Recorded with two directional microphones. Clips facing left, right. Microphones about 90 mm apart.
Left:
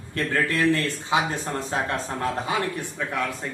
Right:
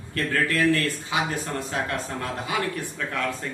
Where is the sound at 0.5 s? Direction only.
20° left (ahead or behind).